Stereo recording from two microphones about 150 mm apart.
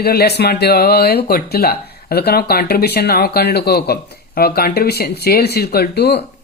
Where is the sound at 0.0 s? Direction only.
90° left.